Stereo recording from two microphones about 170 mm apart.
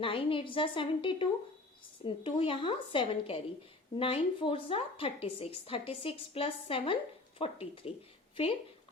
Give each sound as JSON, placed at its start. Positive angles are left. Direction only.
{"t": 0.0, "sound": "a woman's voice", "side_deg": 30}